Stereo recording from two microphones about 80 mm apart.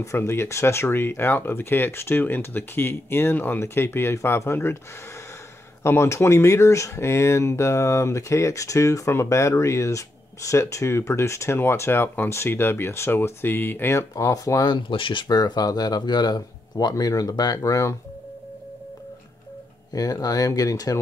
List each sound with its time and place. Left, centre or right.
0.0 s speech: left
5.9 s speech: left
14.1 s speech: left
14.7 s speech: left
19.9 s speech: left